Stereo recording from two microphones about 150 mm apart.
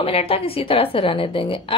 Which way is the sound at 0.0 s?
40° left (ahead or behind).